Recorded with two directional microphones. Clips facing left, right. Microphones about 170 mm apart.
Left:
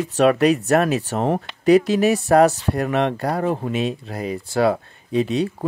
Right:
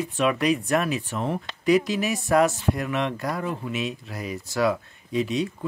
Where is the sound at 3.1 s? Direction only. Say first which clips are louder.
Left 7 dB; 65° left (ahead or behind).